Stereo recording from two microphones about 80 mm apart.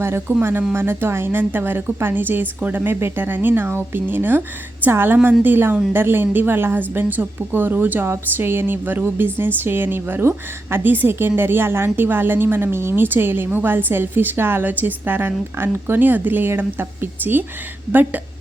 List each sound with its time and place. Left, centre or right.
0.0 s a woman's voice: right